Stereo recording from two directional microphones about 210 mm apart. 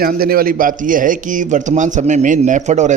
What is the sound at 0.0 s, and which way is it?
Speech, 45° right (ahead or behind).